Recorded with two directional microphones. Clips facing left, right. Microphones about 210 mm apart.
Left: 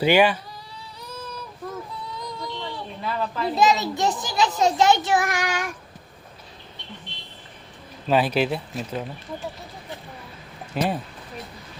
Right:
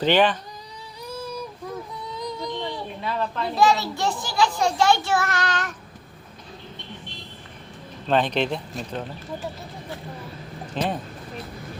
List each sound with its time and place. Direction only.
0.0 s speech: 10° left (ahead or behind)
1.0 s a sound: 10° right (ahead or behind)
3.0 s a woman's voice: centre (ahead or behind)
3.5 s a child's voice: 20° left (ahead or behind)
8.0 s speech: 5° left (ahead or behind)
10.8 s speech: 10° left (ahead or behind)